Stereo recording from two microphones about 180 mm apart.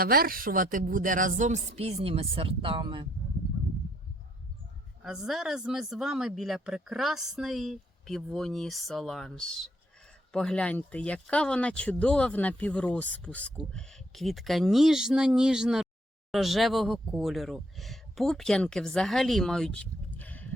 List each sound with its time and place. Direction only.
0.0 s speech: 55° right (ahead or behind); by 3.1 s 25° right (ahead or behind)
5.0 s speech: 5° right (ahead or behind)